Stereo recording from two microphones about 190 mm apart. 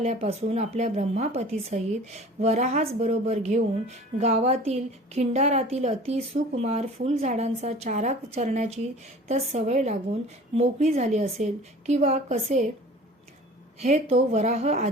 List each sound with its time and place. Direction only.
0.0 s speech: 35° right (ahead or behind)
13.7 s speech: 35° right (ahead or behind)